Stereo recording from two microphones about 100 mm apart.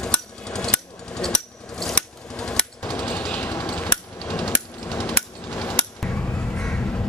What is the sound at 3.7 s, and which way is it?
Hammer, 15° left (ahead or behind).